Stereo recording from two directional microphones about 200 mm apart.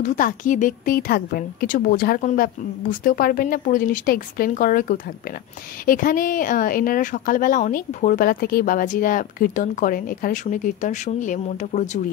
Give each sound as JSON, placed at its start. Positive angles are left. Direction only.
{"t": 0.0, "sound": "speech", "side_deg": 40}